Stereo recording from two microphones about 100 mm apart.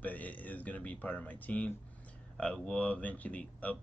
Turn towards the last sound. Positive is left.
turn(degrees=15)  # may be behind; listen again after turning